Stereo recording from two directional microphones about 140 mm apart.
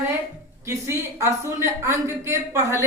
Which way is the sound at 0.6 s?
20° right (ahead or behind).